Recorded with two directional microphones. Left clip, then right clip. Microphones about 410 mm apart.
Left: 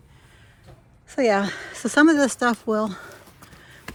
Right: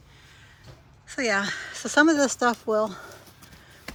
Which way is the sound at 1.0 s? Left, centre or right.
Centre.